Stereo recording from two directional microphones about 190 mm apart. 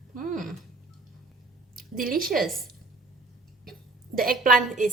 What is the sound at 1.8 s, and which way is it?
Speech, 50° right (ahead or behind).